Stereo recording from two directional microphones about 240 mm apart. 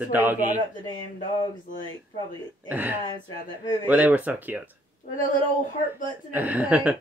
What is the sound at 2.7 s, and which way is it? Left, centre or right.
Speech, centre.